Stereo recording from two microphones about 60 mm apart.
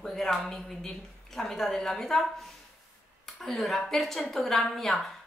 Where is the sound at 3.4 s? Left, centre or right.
Centre.